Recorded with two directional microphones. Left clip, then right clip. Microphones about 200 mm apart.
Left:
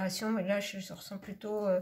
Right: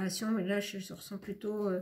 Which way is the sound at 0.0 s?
25° left (ahead or behind).